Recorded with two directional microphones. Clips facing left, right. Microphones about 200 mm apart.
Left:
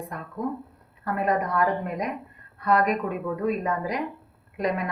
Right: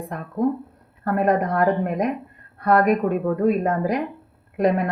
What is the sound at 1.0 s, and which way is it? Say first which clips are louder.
A woman's voice: right 5 dB; 55° right (ahead or behind).